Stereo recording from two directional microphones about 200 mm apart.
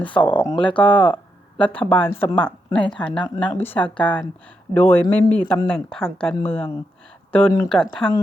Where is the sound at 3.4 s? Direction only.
10° left (ahead or behind).